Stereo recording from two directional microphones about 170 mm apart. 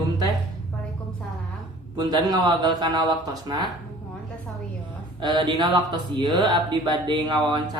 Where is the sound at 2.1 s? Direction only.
25° right (ahead or behind).